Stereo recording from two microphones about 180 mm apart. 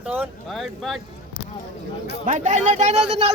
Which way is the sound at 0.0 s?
10° right (ahead or behind).